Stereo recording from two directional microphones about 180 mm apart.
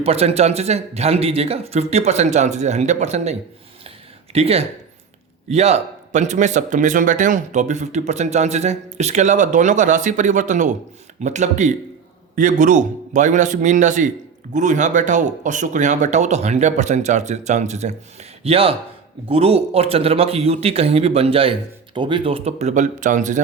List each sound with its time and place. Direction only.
0.0 s speech: 35° right (ahead or behind)
3.8 s a sound: 35° right (ahead or behind)
5.5 s a man's voice: 35° right (ahead or behind)